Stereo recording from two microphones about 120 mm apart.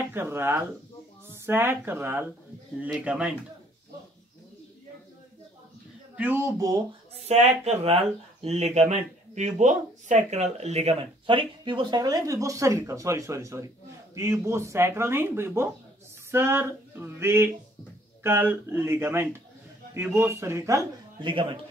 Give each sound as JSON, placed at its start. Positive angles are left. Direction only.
{"t": 0.1, "sound": "speech", "side_deg": -20}
{"t": 6.1, "sound": "speech", "side_deg": -15}
{"t": 7.2, "sound": "speech", "side_deg": -60}
{"t": 16.3, "sound": "a sound", "side_deg": -20}
{"t": 18.2, "sound": "speech", "side_deg": -15}
{"t": 21.2, "sound": "speech", "side_deg": -45}